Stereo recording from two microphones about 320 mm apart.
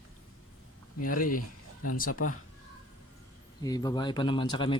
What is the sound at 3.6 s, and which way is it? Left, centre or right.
Speech, centre.